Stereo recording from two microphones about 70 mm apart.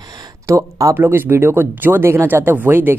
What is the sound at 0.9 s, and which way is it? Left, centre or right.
Speech, right.